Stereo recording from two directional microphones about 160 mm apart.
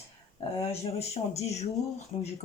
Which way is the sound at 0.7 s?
40° left (ahead or behind).